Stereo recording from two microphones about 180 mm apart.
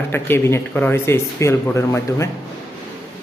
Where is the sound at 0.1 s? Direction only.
10° left (ahead or behind).